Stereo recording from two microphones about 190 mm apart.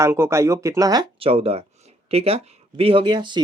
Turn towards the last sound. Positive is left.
turn(degrees=-25)  # may be behind; listen again after turning